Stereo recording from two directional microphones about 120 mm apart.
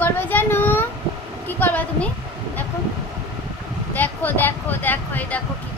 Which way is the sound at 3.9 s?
15° left (ahead or behind).